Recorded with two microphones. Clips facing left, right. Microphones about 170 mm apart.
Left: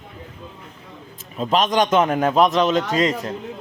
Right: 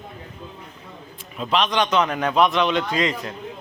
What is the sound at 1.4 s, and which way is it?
A man's voice, 45° left (ahead or behind).